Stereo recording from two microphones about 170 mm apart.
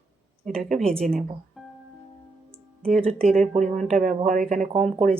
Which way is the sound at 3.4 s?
45° right (ahead or behind).